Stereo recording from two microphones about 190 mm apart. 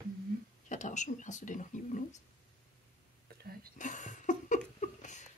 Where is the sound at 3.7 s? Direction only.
40° left (ahead or behind).